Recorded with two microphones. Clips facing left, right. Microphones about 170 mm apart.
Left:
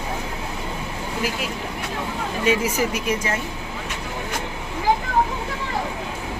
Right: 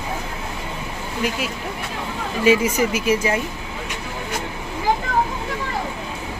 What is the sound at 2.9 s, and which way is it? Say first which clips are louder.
Speech: right 4 dB; 5° right (ahead or behind).